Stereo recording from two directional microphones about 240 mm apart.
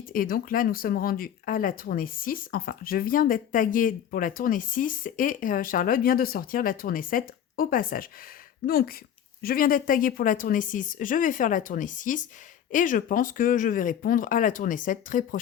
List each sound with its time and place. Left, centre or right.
0.1 s speech: left